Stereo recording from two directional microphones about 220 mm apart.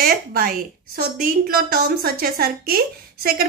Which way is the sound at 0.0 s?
40° right (ahead or behind).